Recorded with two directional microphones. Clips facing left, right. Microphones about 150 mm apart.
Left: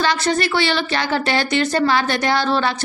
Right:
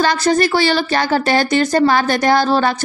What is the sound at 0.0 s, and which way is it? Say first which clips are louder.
A woman's voice: right 4 dB; 40° right (ahead or behind).